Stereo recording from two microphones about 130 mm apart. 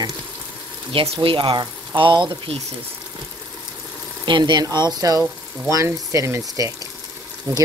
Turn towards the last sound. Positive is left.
turn(degrees=-25)  # may be behind; listen again after turning